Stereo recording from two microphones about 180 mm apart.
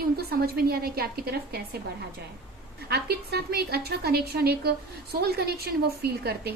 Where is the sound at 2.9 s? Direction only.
65° right (ahead or behind).